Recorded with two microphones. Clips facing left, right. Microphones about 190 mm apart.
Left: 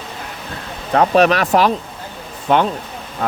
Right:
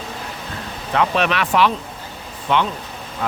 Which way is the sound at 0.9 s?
40° left (ahead or behind).